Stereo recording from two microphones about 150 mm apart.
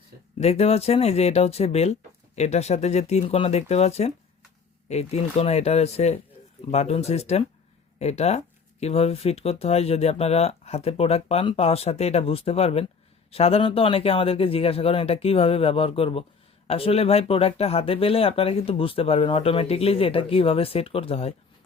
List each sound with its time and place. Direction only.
0.3 s speech: 45° left (ahead or behind)